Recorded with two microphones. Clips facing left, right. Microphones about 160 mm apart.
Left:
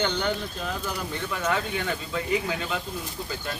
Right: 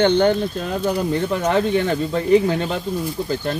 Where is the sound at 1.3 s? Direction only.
35° right (ahead or behind).